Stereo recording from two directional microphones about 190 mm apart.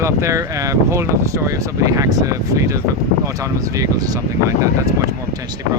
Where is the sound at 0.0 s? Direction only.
15° right (ahead or behind).